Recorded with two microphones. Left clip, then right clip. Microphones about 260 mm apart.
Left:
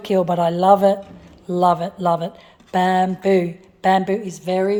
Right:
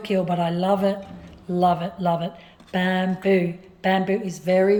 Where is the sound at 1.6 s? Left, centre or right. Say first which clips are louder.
Left 4 dB; centre.